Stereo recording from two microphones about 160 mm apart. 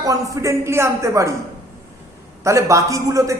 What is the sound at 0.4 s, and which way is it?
Speech, 15° right (ahead or behind).